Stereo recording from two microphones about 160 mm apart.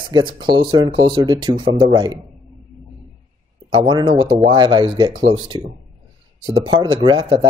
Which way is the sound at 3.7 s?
30° right (ahead or behind).